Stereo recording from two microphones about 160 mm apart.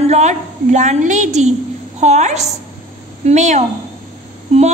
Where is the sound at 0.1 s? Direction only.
45° right (ahead or behind).